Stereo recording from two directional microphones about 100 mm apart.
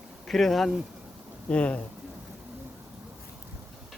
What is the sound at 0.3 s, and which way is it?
Speech, centre (ahead or behind).